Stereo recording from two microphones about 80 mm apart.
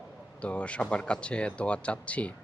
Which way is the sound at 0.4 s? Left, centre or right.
Centre.